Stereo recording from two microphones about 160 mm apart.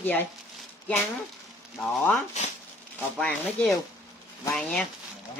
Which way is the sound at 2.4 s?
45° left (ahead or behind).